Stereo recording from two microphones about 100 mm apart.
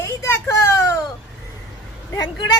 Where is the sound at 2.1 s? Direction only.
45° left (ahead or behind).